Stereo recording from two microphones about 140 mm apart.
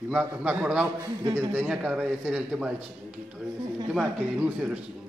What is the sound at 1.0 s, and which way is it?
Speech, 30° right (ahead or behind).